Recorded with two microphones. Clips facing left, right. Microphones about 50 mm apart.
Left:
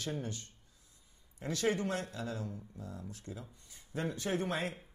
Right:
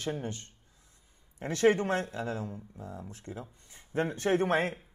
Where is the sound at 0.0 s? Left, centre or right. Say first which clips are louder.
Right 4 dB; right.